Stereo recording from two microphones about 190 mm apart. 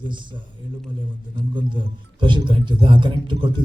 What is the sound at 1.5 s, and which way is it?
A man's voice, 25° right (ahead or behind).